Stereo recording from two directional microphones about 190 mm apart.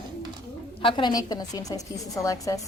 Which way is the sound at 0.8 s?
25° left (ahead or behind).